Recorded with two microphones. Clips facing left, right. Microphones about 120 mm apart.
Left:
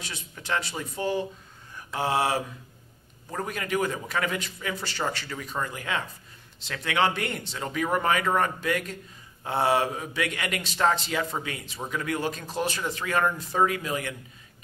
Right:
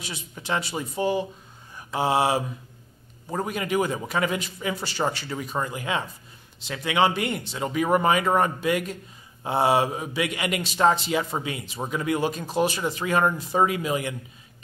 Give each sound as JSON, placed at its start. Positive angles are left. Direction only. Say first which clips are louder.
{"t": 0.0, "sound": "a man's voice", "louder": "right 3 dB", "side_deg": -15}